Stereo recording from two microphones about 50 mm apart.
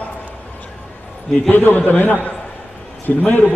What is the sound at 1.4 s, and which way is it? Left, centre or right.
A man's voice, left.